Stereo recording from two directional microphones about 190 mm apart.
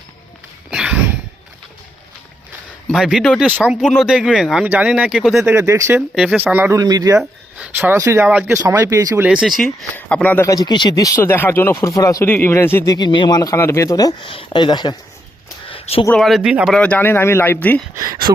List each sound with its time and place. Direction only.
0.7 s a sound: 5° right (ahead or behind)
2.8 s speech: centre (ahead or behind)
5.5 s speech: 15° right (ahead or behind)
7.2 s speech: 10° right (ahead or behind); by 14.9 s 25° left (ahead or behind)
15.7 s a sound: 30° left (ahead or behind)
16.0 s speech: centre (ahead or behind)
17.9 s speech: 20° right (ahead or behind)